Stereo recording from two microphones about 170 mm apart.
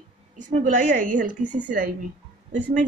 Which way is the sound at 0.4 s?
50° right (ahead or behind).